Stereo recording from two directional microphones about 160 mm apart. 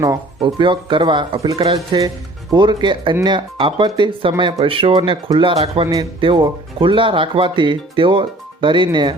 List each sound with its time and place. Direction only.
0.0 s speech: 25° right (ahead or behind)